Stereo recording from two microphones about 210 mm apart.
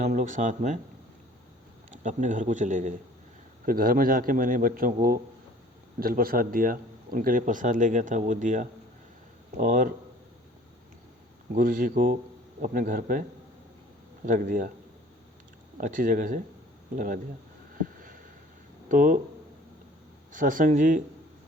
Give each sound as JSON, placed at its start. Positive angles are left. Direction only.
{"t": 0.0, "sound": "speech", "side_deg": -40}
{"t": 1.9, "sound": "speech", "side_deg": -35}
{"t": 11.5, "sound": "speech", "side_deg": -40}
{"t": 14.3, "sound": "speech", "side_deg": -40}
{"t": 15.8, "sound": "speech", "side_deg": -40}
{"t": 17.7, "sound": "a sound", "side_deg": -40}
{"t": 18.9, "sound": "speech", "side_deg": -40}
{"t": 20.3, "sound": "speech", "side_deg": -40}